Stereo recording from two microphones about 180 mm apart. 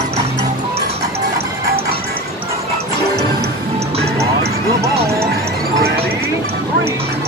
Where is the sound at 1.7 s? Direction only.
55° right (ahead or behind).